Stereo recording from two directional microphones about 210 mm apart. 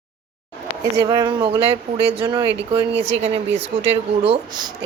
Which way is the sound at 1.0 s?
20° right (ahead or behind).